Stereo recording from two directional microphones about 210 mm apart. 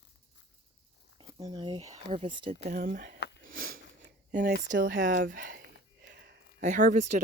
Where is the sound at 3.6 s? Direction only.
45° right (ahead or behind).